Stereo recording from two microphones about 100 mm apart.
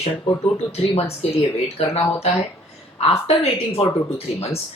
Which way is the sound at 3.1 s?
85° left.